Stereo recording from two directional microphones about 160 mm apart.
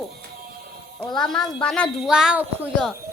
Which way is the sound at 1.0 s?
5° left (ahead or behind).